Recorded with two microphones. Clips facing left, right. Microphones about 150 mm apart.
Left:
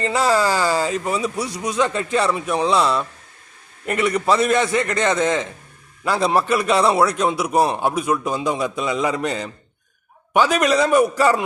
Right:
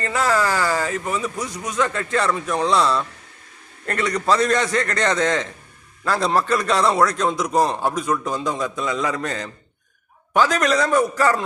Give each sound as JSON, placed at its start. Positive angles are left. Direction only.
{"t": 0.0, "sound": "a man's voice", "side_deg": 15}